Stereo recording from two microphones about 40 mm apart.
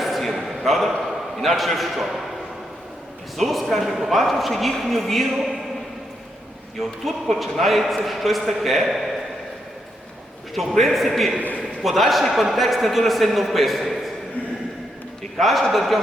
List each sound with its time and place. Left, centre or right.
0.0 s a sound: centre
1.4 s a man's voice: centre
3.3 s a man's voice: centre
6.7 s a man's voice: centre
10.8 s a man's voice: centre
11.3 s a man's voice: left
11.8 s a man's voice: centre
15.4 s a man's voice: centre